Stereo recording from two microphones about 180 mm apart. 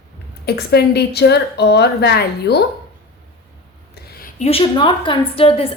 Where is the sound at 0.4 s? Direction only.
65° left (ahead or behind).